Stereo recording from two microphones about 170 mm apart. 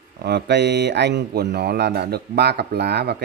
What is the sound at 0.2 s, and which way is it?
Speech, 85° right.